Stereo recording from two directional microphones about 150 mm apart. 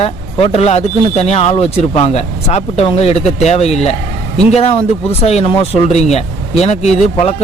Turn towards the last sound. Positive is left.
turn(degrees=45)  # may be behind; listen again after turning